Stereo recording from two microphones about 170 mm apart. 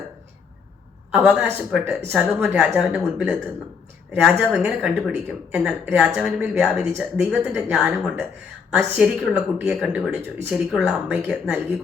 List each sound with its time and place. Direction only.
1.1 s speech: 5° right (ahead or behind)